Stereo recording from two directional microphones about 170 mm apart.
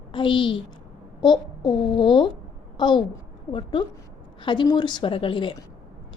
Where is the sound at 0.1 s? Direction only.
30° left (ahead or behind).